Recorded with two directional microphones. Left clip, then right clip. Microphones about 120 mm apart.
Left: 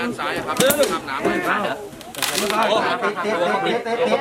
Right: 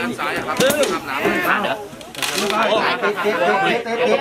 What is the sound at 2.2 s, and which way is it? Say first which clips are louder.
Speech: right 1 dB; 25° left (ahead or behind).